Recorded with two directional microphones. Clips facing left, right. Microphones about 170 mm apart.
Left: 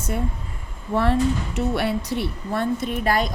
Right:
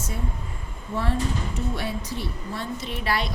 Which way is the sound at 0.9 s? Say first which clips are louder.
Left 7 dB; 70° left (ahead or behind).